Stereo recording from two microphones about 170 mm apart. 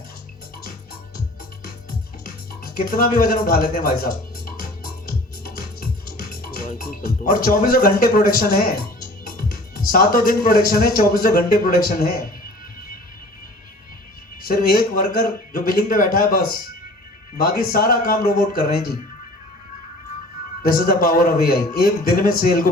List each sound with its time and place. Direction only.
2.5 s music: 60° left (ahead or behind)
9.9 s speech: 55° left (ahead or behind)
14.4 s speech: 60° left (ahead or behind)
20.7 s speech: 60° left (ahead or behind)